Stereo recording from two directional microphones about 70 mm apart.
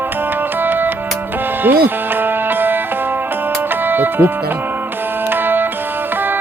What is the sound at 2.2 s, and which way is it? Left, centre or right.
Music, right.